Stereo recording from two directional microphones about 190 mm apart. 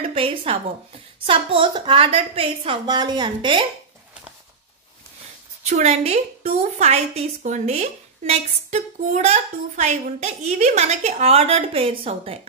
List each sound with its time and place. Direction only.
0.1 s a woman's voice: 30° right (ahead or behind)
5.7 s a woman's voice: 35° right (ahead or behind)